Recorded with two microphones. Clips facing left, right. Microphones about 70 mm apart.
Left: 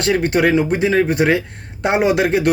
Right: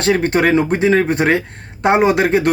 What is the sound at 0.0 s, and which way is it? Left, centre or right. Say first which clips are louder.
Speech: right 1 dB; right.